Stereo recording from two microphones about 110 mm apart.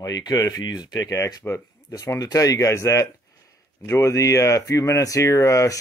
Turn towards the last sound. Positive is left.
turn(degrees=30)  # may be behind; listen again after turning